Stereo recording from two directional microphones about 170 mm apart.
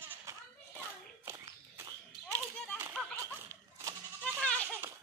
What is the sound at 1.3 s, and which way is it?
Walk, 15° right (ahead or behind).